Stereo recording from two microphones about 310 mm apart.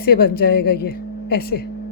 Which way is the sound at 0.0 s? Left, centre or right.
Left.